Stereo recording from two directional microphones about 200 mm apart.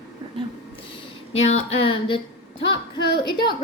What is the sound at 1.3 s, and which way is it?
Speech, 30° left (ahead or behind).